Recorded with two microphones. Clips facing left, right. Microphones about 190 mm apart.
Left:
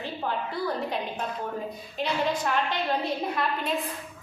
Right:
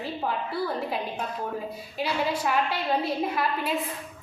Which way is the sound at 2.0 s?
5° right (ahead or behind).